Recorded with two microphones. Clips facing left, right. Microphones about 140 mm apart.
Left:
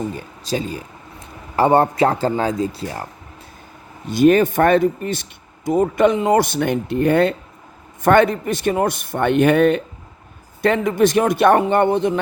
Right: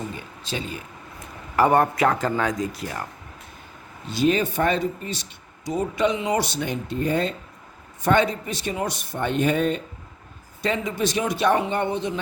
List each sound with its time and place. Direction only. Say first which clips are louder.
0.1 s speech: left 7 dB; 40° left (ahead or behind)
4.1 s speech: left 8 dB; 55° left (ahead or behind)
8.0 s speech: left 6 dB; 55° left (ahead or behind)